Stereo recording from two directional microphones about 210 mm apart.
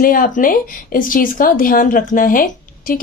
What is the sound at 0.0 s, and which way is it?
Speech, 40° left (ahead or behind).